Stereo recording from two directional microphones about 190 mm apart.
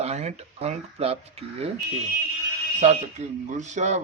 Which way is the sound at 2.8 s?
35° right (ahead or behind).